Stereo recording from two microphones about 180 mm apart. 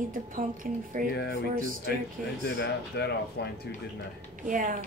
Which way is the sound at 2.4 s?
65° left (ahead or behind).